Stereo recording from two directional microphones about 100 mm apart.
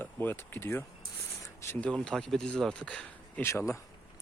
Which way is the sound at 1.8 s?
10° left (ahead or behind).